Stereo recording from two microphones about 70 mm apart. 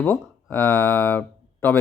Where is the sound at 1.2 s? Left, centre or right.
Left.